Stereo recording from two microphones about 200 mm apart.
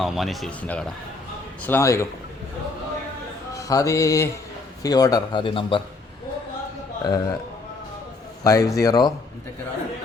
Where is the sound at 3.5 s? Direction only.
15° left (ahead or behind).